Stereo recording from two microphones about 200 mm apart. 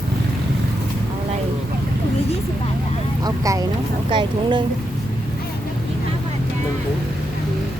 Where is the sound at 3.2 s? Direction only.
15° right (ahead or behind).